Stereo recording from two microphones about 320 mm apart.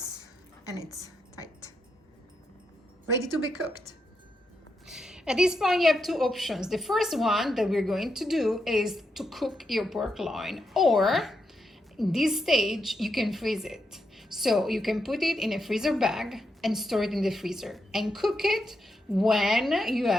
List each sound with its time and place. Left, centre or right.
0.6 s a woman's voice: centre
1.0 s a sound: centre
4.9 s a woman's voice: centre